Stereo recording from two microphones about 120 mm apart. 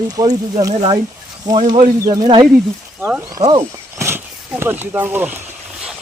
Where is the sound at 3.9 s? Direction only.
20° right (ahead or behind).